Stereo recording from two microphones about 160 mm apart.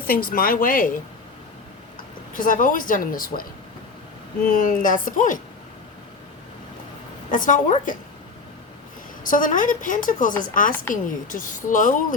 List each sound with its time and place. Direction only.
0.1 s speech: 65° left (ahead or behind)
2.3 s speech: 55° left (ahead or behind)
4.4 s speech: 60° left (ahead or behind)
7.3 s speech: 55° left (ahead or behind)
9.2 s speech: 55° left (ahead or behind)